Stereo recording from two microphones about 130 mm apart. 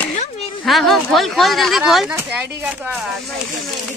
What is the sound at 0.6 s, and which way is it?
Speech, centre (ahead or behind).